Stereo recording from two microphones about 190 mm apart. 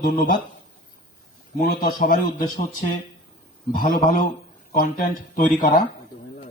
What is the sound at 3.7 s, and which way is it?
A man's voice, 45° left (ahead or behind).